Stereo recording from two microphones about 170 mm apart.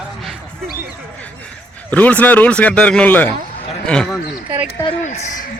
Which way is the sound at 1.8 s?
10° left (ahead or behind).